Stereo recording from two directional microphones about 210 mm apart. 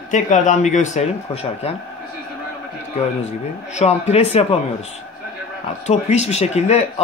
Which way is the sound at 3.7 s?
30° left (ahead or behind).